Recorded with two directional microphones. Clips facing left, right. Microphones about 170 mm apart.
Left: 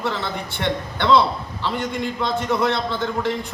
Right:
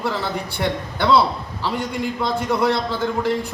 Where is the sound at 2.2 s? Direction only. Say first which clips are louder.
Right 1 dB; 10° right (ahead or behind).